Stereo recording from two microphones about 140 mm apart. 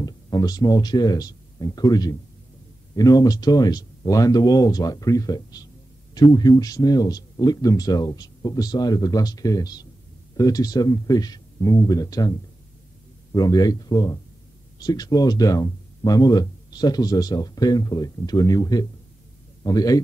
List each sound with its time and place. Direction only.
0.0 s speech: 30° left (ahead or behind)